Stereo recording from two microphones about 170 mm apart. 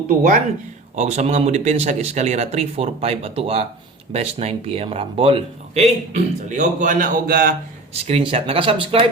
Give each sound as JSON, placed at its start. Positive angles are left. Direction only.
{"t": 0.2, "sound": "speech", "side_deg": -55}
{"t": 0.9, "sound": "speech", "side_deg": -40}
{"t": 8.0, "sound": "speech", "side_deg": -35}